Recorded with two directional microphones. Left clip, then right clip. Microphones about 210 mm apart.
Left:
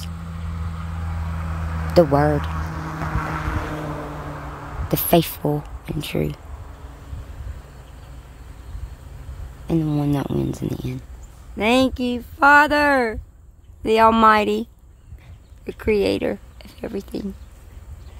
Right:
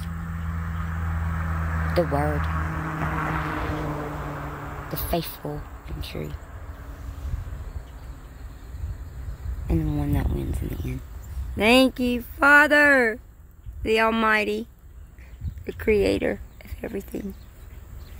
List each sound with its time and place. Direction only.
0.6 s a sound: 35° left (ahead or behind)
9.7 s speech: 25° left (ahead or behind)
11.5 s speech: 5° left (ahead or behind)